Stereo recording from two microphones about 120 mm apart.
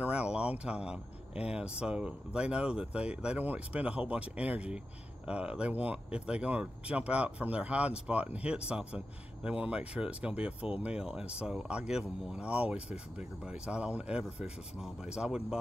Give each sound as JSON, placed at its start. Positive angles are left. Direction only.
{"t": 0.0, "sound": "speech", "side_deg": -10}